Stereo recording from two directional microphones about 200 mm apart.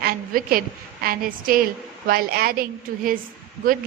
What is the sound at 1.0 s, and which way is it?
A woman's voice, 45° right (ahead or behind).